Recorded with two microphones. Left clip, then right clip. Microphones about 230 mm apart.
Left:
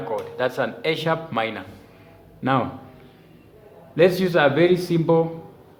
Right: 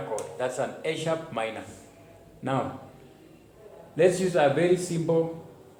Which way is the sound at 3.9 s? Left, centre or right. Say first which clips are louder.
Left 5 dB; left.